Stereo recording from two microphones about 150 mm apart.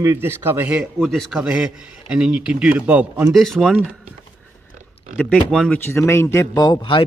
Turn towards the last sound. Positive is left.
turn(degrees=30)  # may be behind; listen again after turning